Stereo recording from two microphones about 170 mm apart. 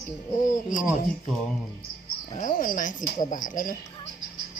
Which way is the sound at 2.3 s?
50° left (ahead or behind).